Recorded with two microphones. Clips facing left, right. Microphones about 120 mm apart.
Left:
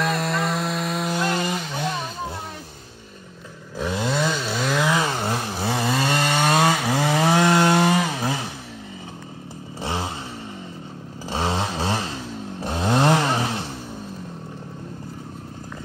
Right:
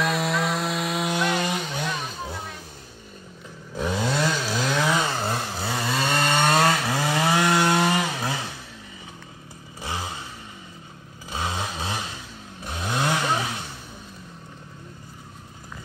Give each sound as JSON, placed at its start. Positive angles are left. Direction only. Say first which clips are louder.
{"t": 0.0, "sound": "wood", "louder": "left 1 dB", "side_deg": 0}
{"t": 3.7, "sound": "chainsaw", "louder": "left 1 dB", "side_deg": 0}
{"t": 5.6, "sound": "chainsaw", "louder": "left 4 dB", "side_deg": 20}
{"t": 6.0, "sound": "chainsaw", "louder": "right 2 dB", "side_deg": 5}
{"t": 7.1, "sound": "wood", "louder": "left 3 dB", "side_deg": 25}
{"t": 8.1, "sound": "vehicle", "louder": "left 3 dB", "side_deg": 20}
{"t": 9.8, "sound": "a sound", "louder": "left 4 dB", "side_deg": 25}
{"t": 11.2, "sound": "vehicle", "louder": "left 5 dB", "side_deg": 30}
{"t": 12.5, "sound": "chainsaw", "louder": "left 7 dB", "side_deg": 35}